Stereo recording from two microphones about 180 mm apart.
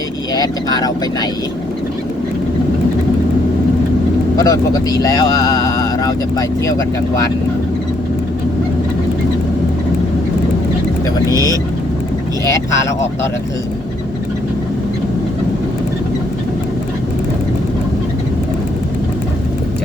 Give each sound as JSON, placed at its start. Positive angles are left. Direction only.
{"t": 0.3, "sound": "speech", "side_deg": 20}
{"t": 4.4, "sound": "speech", "side_deg": 20}
{"t": 11.3, "sound": "speech", "side_deg": -20}